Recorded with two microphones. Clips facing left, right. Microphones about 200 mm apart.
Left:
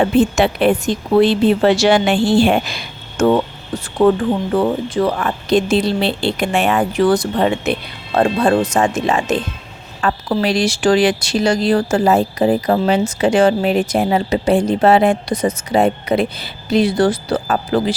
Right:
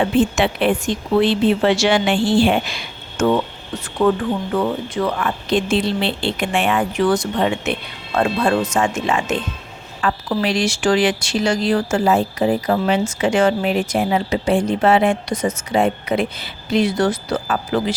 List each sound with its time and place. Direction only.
0.0 s speech: 40° left (ahead or behind)